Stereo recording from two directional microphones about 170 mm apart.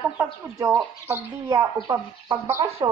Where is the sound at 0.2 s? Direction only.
15° right (ahead or behind).